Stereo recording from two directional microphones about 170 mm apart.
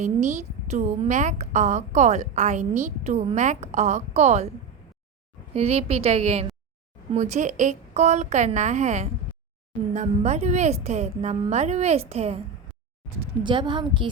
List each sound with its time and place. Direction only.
0.0 s a woman's voice: 45° right (ahead or behind)
5.5 s a woman's voice: 35° right (ahead or behind)
13.4 s a woman's voice: 30° right (ahead or behind)